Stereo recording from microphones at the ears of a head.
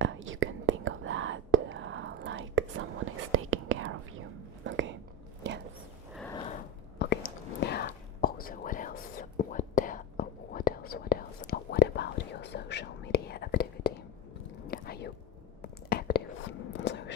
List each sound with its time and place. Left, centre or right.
0.0 s whispering: right
6.3 s whispering: left